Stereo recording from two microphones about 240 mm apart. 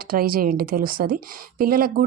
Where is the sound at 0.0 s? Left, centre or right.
Right.